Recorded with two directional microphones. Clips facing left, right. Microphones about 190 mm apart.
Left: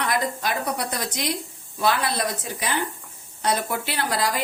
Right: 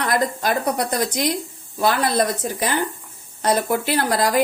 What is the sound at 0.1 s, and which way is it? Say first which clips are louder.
Speech: right 5 dB; 45° right (ahead or behind).